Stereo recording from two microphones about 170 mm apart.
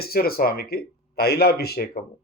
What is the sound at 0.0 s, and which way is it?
Speech, 65° left (ahead or behind).